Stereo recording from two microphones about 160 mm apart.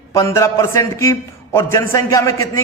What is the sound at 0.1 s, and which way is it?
A man's voice, 20° left (ahead or behind).